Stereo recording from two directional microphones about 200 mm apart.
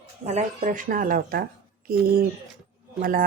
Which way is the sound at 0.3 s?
35° right (ahead or behind).